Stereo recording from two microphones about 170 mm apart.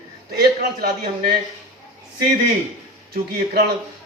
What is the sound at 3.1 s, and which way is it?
Speech, 70° right (ahead or behind).